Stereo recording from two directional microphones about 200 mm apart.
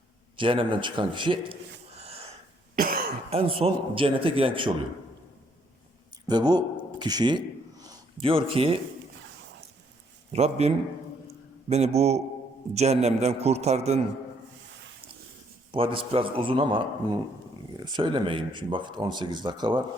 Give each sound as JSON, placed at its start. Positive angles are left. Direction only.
{"t": 0.3, "sound": "speech", "side_deg": -25}
{"t": 2.0, "sound": "wheeze", "side_deg": -30}
{"t": 2.7, "sound": "cough", "side_deg": -45}
{"t": 3.2, "sound": "speech", "side_deg": -30}
{"t": 6.2, "sound": "a man's voice", "side_deg": -20}
{"t": 10.3, "sound": "a man's voice", "side_deg": -30}
{"t": 11.3, "sound": "a sound", "side_deg": -30}
{"t": 12.7, "sound": "a man's voice", "side_deg": -35}
{"t": 15.7, "sound": "speech", "side_deg": -25}